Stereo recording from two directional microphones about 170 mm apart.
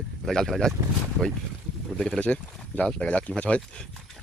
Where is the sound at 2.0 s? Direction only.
5° left (ahead or behind).